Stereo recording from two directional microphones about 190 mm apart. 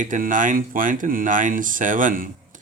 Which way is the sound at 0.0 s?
45° right (ahead or behind).